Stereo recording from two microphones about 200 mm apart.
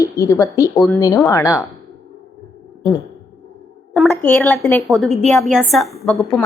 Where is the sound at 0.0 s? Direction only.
15° left (ahead or behind).